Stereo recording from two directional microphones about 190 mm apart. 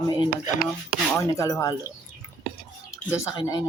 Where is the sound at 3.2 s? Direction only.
20° left (ahead or behind).